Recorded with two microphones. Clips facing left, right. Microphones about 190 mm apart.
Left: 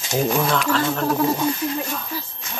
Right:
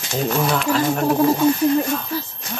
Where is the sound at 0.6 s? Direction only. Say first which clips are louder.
Right 3 dB; 15° right (ahead or behind).